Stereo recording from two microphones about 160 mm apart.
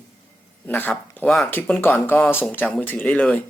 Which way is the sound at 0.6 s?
10° left (ahead or behind).